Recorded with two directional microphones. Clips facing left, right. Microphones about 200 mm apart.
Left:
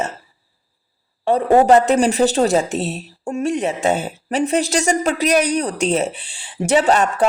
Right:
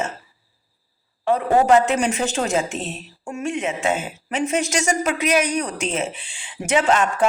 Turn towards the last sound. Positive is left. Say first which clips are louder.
# left 3 dB
turn(degrees=35)  # may be behind; listen again after turning